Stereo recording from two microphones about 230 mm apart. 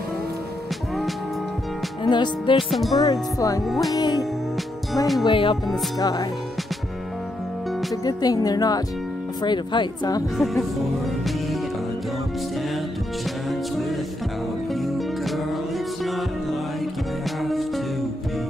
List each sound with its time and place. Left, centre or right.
2.0 s speech: centre
2.5 s speech: centre
3.0 s speech: centre
3.6 s speech: centre
3.9 s speech: centre
7.9 s speech: centre
10.3 s speech: centre
13.5 s music: centre